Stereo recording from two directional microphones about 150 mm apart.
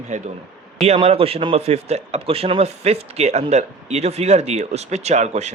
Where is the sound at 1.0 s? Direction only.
40° right (ahead or behind).